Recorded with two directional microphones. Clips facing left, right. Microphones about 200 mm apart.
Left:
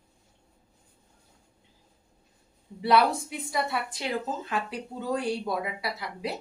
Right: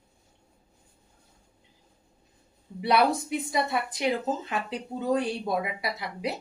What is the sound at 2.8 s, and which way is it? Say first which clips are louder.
A woman's voice: even; 20° right (ahead or behind).